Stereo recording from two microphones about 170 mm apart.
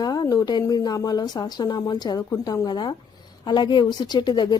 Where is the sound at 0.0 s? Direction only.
20° left (ahead or behind).